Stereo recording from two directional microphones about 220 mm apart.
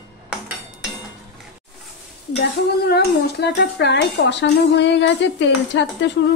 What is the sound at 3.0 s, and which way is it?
Speech, 45° left (ahead or behind).